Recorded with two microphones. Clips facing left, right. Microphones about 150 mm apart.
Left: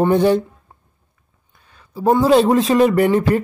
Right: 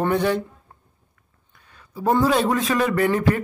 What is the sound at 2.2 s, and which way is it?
Speech, 30° left (ahead or behind).